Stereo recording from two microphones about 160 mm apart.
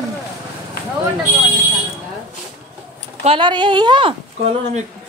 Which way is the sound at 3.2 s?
30° right (ahead or behind).